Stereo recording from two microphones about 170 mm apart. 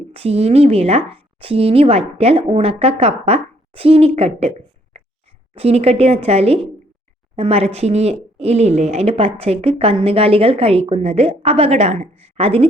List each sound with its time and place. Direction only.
0.1 s speech: 35° right (ahead or behind)
5.5 s speech: 35° right (ahead or behind)